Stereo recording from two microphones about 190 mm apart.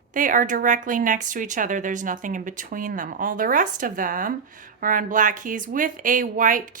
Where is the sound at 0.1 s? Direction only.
45° right (ahead or behind).